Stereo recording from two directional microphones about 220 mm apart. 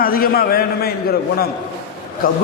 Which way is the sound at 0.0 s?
40° left (ahead or behind).